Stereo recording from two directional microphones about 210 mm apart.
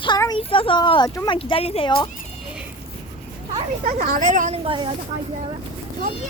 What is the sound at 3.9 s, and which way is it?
Speech, 40° right (ahead or behind).